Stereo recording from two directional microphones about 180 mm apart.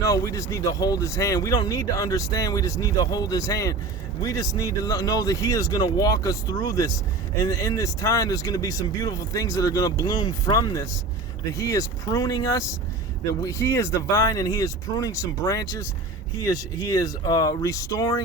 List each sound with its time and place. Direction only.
0.0 s speech: 20° left (ahead or behind)